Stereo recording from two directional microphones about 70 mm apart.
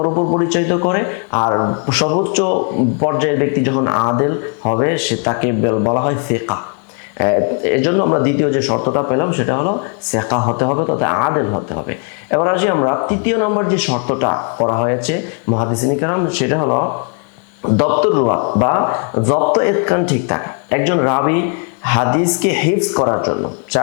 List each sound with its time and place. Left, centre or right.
0.0 s speech: left